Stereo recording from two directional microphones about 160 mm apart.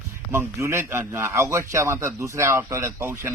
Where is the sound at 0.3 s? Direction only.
15° right (ahead or behind).